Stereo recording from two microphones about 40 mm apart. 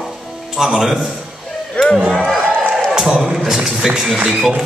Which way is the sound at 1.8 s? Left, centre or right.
Left.